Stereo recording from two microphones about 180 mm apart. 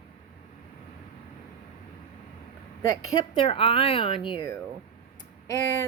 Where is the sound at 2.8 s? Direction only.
25° left (ahead or behind).